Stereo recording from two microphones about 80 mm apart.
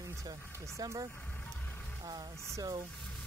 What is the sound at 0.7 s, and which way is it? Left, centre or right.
Speech, right.